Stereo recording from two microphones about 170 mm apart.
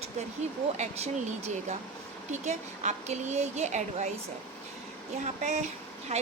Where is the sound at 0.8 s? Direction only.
40° right (ahead or behind).